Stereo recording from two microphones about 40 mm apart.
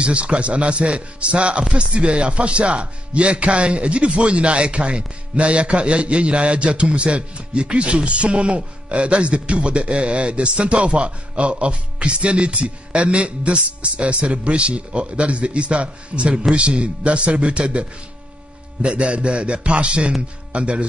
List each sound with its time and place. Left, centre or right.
0.0 s speech: right